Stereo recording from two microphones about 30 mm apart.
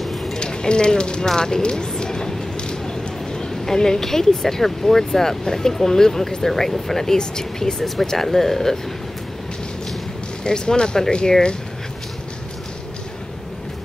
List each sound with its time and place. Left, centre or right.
0.0 s a sound: centre
0.4 s speech: left
1.2 s a sound: left
3.6 s speech: centre
7.2 s speech: left
7.8 s speech: centre
10.4 s speech: left